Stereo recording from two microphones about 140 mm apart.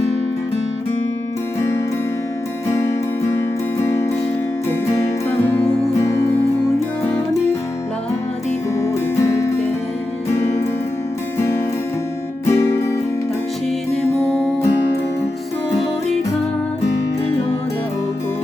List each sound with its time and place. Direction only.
3.2 s music: 20° left (ahead or behind)
10.3 s music: 20° left (ahead or behind)
14.1 s music: 15° left (ahead or behind)